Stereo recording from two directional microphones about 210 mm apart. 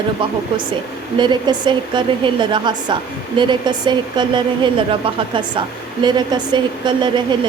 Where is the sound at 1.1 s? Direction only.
20° right (ahead or behind).